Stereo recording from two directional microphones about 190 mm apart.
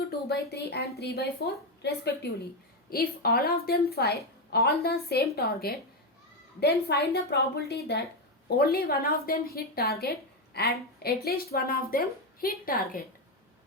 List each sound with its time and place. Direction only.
0.3 s a woman's voice: 60° left (ahead or behind)